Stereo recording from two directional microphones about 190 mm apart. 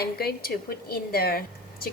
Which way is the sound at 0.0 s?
55° left (ahead or behind).